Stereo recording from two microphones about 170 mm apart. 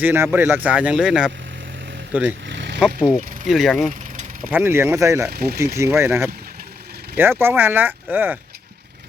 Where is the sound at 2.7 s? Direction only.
5° right (ahead or behind).